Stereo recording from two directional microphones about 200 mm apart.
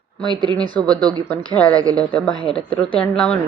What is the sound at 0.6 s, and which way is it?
Speech, 20° right (ahead or behind).